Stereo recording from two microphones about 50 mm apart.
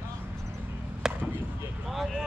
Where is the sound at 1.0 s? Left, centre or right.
Centre.